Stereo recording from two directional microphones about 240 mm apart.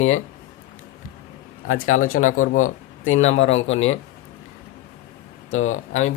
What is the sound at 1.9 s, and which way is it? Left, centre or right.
Speech, left.